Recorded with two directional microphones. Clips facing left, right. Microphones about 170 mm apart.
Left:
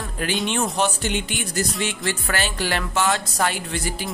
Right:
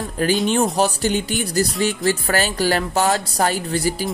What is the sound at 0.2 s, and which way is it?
Speech, 35° right (ahead or behind).